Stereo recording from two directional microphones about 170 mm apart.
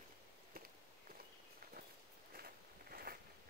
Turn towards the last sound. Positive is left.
turn(degrees=-60)  # may be behind; listen again after turning